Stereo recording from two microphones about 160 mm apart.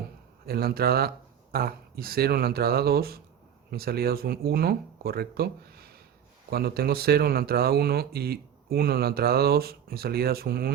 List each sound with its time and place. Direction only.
0.4 s speech: 70° right (ahead or behind)